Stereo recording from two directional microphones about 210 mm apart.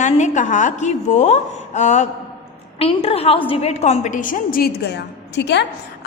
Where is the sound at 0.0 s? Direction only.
35° left (ahead or behind).